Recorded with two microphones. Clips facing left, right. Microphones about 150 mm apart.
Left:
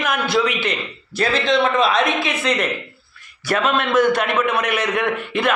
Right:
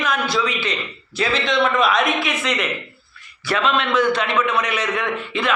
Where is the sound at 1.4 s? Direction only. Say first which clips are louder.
Left 1 dB; 30° left (ahead or behind).